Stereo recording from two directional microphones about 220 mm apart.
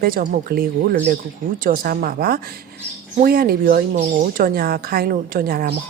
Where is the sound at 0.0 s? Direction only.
45° right (ahead or behind).